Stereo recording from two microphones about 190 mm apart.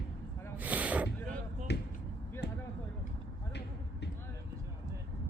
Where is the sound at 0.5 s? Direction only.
10° right (ahead or behind).